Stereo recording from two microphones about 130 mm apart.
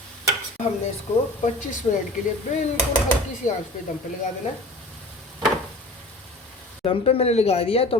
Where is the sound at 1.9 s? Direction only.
50° left (ahead or behind).